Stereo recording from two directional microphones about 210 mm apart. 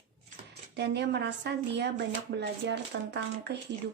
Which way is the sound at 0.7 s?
55° right (ahead or behind).